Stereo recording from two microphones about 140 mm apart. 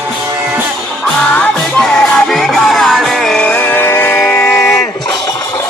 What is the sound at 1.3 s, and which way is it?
Music, 5° left (ahead or behind).